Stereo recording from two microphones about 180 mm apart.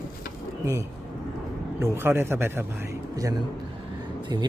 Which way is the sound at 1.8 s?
10° right (ahead or behind).